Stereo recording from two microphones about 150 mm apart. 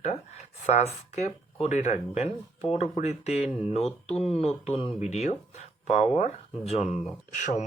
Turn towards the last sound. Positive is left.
turn(degrees=50)  # may be behind; listen again after turning